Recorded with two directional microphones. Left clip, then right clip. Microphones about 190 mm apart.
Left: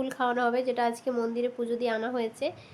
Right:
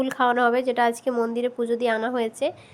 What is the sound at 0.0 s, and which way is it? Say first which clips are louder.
Speech: right 7 dB; 25° right (ahead or behind).